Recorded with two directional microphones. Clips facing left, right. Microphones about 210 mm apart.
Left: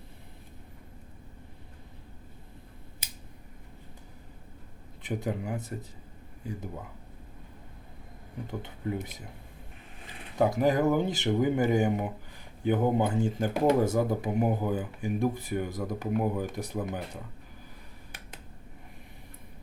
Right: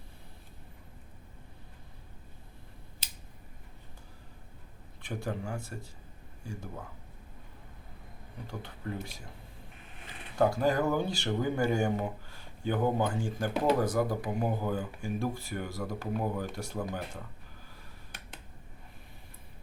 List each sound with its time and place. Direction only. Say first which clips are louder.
5.0 s speech: left 4 dB; 20° left (ahead or behind)
8.4 s speech: left 5 dB; 20° left (ahead or behind)
10.3 s speech: left 2 dB; 20° left (ahead or behind)